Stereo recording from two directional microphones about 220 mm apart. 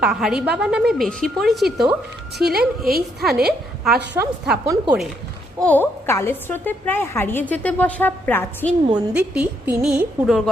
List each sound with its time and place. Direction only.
0.0 s a woman's voice: centre (ahead or behind)
2.4 s speech: 45° right (ahead or behind)
3.2 s a woman's voice: centre (ahead or behind)
5.6 s a woman's voice: 10° left (ahead or behind)
9.1 s a woman's voice: 5° right (ahead or behind)